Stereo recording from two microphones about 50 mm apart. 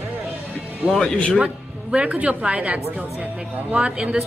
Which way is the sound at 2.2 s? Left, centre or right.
Right.